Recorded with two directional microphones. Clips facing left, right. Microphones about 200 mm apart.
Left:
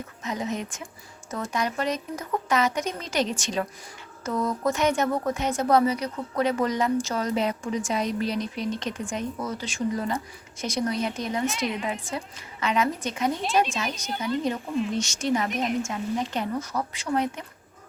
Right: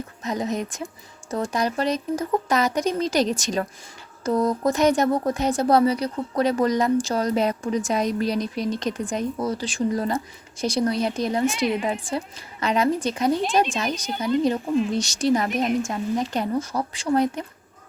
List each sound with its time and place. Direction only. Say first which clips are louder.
0.2 s a woman's voice: right 4 dB; 35° right (ahead or behind)